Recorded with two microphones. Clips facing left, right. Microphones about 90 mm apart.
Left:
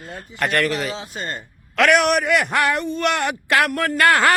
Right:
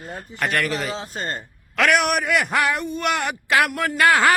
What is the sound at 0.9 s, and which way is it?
Speech, 40° right (ahead or behind).